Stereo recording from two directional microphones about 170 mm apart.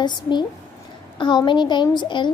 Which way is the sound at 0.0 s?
25° left (ahead or behind).